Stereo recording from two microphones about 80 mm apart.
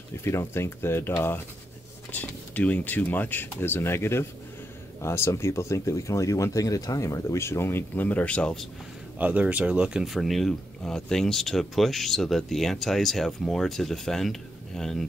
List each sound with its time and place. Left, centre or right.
0.2 s speech: left; by 8.6 s centre
9.2 s speech: centre